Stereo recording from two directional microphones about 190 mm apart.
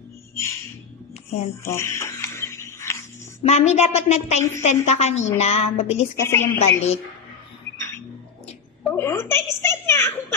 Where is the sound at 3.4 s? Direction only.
35° left (ahead or behind).